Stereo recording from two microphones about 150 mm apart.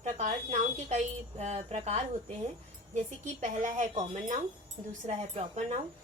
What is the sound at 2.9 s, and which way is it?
A woman's voice, 55° right (ahead or behind).